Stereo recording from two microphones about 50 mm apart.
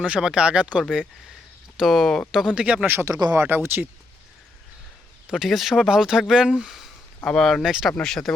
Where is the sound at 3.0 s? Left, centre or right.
Right.